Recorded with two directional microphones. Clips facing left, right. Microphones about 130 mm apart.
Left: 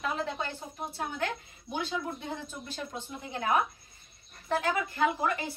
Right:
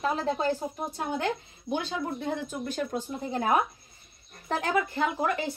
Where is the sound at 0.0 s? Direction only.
35° right (ahead or behind).